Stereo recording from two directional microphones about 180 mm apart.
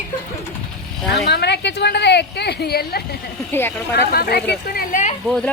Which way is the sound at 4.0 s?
60° left (ahead or behind).